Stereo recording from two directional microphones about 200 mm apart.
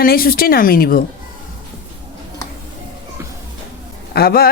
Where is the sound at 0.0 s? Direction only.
50° left (ahead or behind).